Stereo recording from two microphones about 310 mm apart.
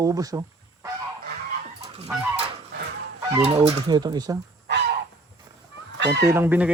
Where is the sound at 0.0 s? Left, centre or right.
Centre.